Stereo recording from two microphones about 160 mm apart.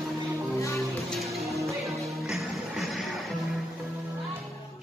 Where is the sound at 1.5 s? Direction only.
20° right (ahead or behind).